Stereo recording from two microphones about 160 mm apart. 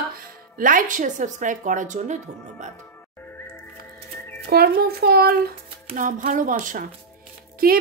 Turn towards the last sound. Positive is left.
turn(degrees=-65)  # may be behind; listen again after turning